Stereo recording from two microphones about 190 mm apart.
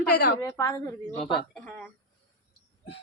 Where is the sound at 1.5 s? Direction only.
5° left (ahead or behind).